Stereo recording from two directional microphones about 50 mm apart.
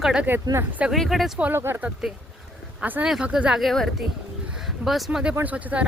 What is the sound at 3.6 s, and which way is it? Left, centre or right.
Speech, centre.